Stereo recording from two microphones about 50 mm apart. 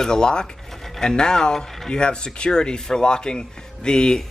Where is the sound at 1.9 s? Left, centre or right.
Centre.